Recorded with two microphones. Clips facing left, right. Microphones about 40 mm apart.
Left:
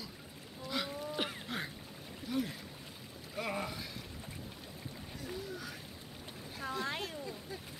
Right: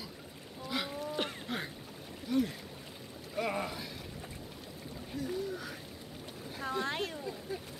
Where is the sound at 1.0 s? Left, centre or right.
Centre.